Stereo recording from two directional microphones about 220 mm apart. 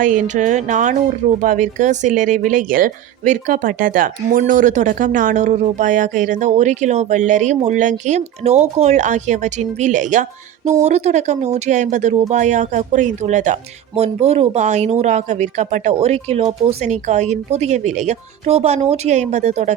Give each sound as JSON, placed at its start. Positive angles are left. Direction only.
{"t": 0.0, "sound": "speech", "side_deg": -35}